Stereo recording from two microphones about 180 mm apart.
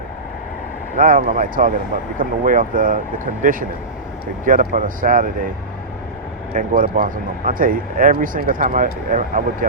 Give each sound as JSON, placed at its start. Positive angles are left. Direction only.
{"t": 0.9, "sound": "speech", "side_deg": -50}
{"t": 6.5, "sound": "speech", "side_deg": -50}